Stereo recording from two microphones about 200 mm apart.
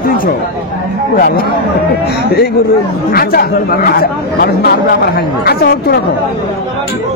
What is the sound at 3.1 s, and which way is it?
Speech, 50° left (ahead or behind).